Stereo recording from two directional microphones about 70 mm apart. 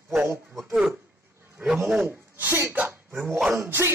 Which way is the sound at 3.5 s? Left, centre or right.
Right.